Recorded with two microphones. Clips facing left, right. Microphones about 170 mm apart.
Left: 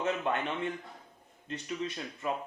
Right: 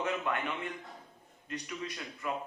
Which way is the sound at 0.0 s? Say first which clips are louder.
Left 2 dB; 25° left (ahead or behind).